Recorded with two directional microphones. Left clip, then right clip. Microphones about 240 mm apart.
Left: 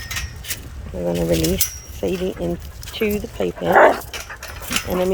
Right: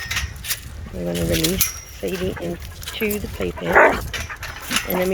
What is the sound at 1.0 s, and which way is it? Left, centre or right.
Speech, centre.